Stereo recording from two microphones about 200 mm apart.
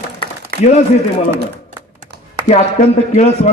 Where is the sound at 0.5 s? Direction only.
50° right (ahead or behind).